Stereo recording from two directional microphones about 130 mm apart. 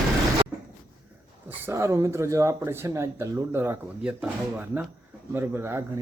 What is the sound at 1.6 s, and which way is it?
Speech, 25° right (ahead or behind).